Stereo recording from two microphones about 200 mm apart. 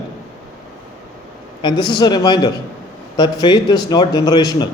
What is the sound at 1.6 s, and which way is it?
A man's voice, 25° left (ahead or behind).